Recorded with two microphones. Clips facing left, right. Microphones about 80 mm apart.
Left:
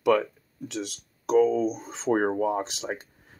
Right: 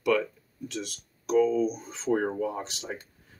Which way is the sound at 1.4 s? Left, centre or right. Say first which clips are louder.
Left 1 dB; left.